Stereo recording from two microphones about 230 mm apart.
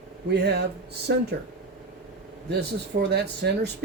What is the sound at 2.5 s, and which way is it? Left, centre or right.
Speech, right.